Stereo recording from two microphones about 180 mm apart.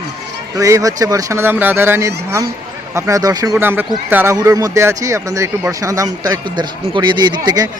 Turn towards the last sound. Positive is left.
turn(degrees=-20)  # may be behind; listen again after turning